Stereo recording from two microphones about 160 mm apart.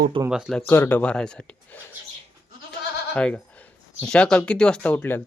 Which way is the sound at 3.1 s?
10° left (ahead or behind).